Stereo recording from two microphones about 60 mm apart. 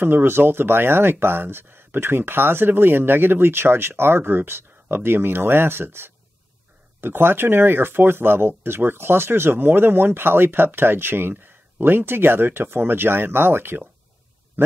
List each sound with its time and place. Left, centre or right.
0.0 s speech: right